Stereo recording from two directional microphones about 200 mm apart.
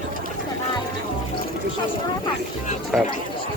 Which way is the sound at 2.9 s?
Centre (ahead or behind).